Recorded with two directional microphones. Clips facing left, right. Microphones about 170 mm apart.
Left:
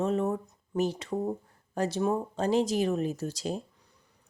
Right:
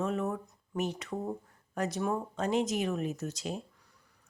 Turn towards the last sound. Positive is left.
turn(degrees=35)  # may be behind; listen again after turning